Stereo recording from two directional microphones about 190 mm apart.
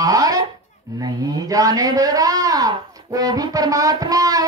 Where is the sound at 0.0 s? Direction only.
20° right (ahead or behind).